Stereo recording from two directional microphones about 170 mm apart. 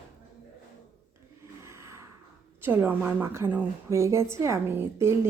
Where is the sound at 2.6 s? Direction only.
10° right (ahead or behind).